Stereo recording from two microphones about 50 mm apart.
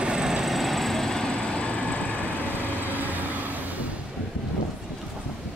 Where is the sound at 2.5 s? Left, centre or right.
Right.